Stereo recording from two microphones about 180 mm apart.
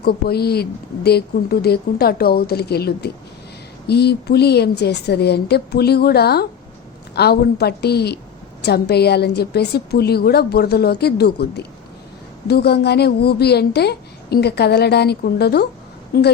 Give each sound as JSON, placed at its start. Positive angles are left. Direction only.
{"t": 0.0, "sound": "a woman's voice", "side_deg": 60}